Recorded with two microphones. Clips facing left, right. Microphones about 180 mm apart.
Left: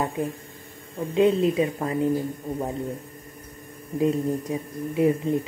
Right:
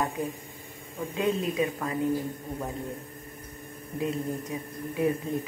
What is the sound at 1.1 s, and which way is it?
Speech, 30° left (ahead or behind).